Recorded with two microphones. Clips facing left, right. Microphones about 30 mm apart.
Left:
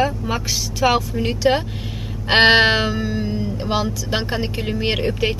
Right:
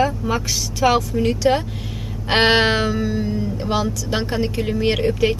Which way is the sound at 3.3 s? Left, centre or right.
Left.